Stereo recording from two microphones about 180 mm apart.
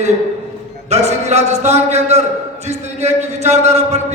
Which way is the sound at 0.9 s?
40° right (ahead or behind).